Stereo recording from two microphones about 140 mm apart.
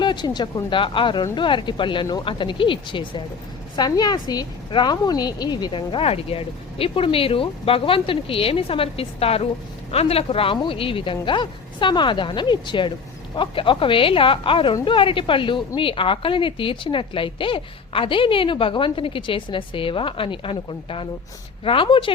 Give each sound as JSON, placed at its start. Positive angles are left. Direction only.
{"t": 0.0, "sound": "a woman's voice", "side_deg": 35}